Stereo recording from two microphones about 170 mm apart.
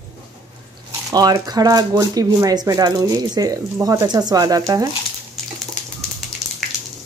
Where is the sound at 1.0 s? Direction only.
20° right (ahead or behind).